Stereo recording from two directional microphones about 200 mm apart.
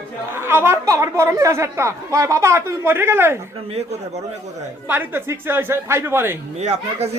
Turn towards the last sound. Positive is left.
turn(degrees=-35)  # may be behind; listen again after turning